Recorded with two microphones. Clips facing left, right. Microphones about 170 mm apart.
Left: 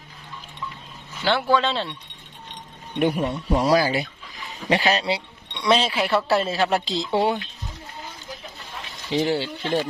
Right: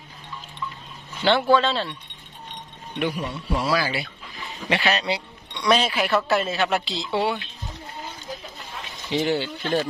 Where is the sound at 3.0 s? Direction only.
50° left (ahead or behind).